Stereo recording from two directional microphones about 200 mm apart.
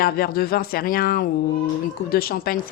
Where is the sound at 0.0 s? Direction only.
50° left (ahead or behind).